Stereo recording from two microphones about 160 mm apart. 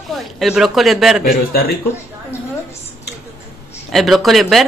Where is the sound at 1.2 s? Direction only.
70° left (ahead or behind).